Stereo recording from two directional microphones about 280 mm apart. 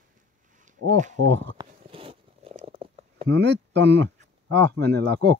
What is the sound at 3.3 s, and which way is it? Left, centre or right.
Speech, right.